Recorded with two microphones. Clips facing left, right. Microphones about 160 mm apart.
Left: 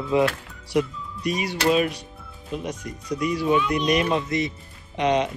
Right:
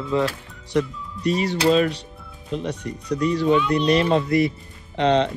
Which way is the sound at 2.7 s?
35° right (ahead or behind).